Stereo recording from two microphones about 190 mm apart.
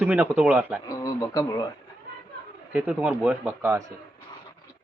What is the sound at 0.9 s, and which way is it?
Speech, 20° left (ahead or behind).